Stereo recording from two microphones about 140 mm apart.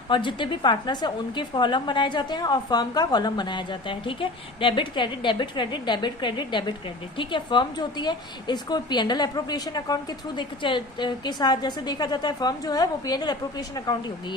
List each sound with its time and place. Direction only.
0.1 s a woman's voice: 35° left (ahead or behind)